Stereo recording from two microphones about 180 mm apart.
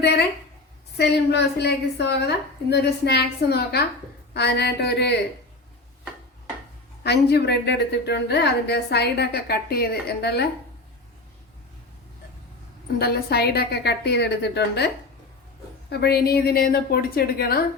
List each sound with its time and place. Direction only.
0.0 s a woman's voice: 65° left (ahead or behind)
7.0 s a woman's voice: 65° left (ahead or behind)
13.0 s a woman's voice: 60° left (ahead or behind)
15.9 s a woman's voice: 65° left (ahead or behind)